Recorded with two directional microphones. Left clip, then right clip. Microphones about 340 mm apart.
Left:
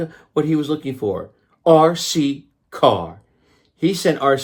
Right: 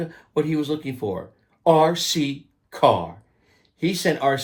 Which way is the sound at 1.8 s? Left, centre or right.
Centre.